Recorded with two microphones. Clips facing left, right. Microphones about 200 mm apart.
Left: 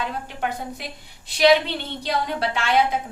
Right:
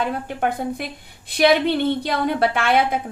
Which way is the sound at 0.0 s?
50° right (ahead or behind).